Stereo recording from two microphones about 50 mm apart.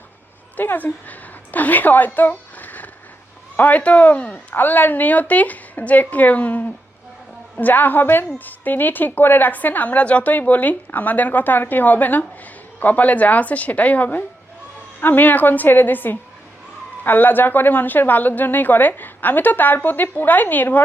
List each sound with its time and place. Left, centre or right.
0.5 s a woman's voice: left